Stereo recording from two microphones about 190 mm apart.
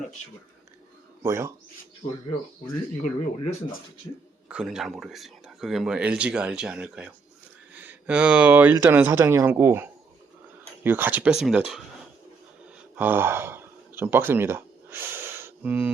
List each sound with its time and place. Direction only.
1.2 s speech: 15° right (ahead or behind)
3.0 s speech: 40° left (ahead or behind)
4.4 s speech: 5° right (ahead or behind)
13.0 s speech: 10° right (ahead or behind)